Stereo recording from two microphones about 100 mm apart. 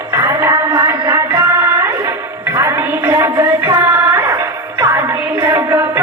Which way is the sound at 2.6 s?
30° right (ahead or behind).